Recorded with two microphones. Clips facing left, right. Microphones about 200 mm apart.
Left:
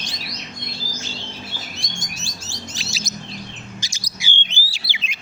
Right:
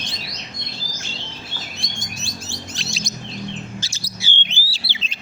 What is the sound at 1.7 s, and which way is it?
Chirp, 55° right (ahead or behind).